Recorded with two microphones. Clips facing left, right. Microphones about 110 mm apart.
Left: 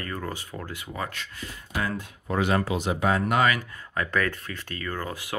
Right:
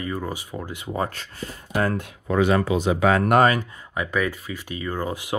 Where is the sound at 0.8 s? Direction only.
35° right (ahead or behind).